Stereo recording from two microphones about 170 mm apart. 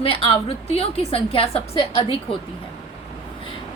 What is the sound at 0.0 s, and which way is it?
A woman's voice, 35° left (ahead or behind).